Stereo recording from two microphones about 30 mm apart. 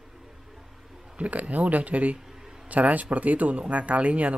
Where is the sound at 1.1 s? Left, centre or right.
Right.